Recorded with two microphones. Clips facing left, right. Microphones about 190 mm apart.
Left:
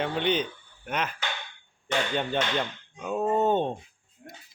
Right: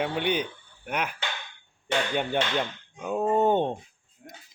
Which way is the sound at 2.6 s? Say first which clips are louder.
Right 1 dB; 15° right (ahead or behind).